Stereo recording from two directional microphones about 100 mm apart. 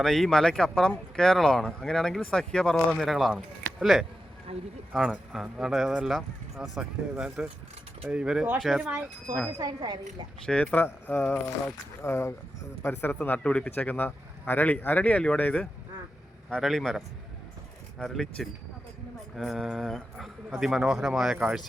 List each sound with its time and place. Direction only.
0.0 s speech: 5° left (ahead or behind)
4.5 s speech: 90° right
4.9 s speech: 5° right (ahead or behind)
9.6 s speech: 40° right (ahead or behind)
10.4 s speech: 10° left (ahead or behind)
16.6 s speech: centre (ahead or behind)
18.0 s speech: 5° left (ahead or behind)